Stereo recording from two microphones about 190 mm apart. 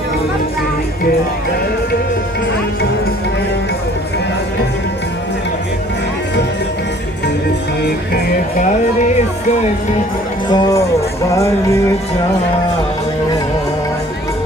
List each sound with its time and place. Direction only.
8.5 s speech: 40° left (ahead or behind)
10.5 s speech: 15° left (ahead or behind)
11.3 s music: 15° left (ahead or behind)